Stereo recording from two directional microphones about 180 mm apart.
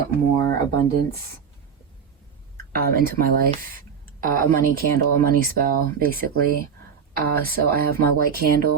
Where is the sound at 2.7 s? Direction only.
55° right (ahead or behind).